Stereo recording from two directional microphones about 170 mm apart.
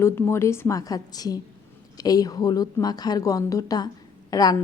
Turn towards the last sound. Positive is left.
turn(degrees=20)  # may be behind; listen again after turning